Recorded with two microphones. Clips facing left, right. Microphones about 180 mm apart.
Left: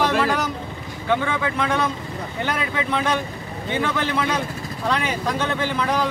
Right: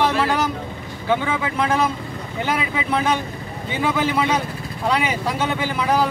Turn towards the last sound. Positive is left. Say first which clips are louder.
# right 2 dB
turn(degrees=-5)  # may be behind; listen again after turning